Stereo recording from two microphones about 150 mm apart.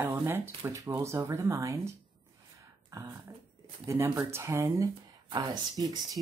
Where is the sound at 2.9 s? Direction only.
20° right (ahead or behind).